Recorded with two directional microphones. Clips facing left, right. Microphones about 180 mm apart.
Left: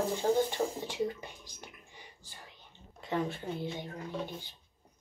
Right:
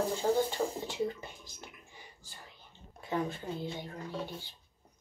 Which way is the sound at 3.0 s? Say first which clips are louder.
Left 1 dB; 25° left (ahead or behind).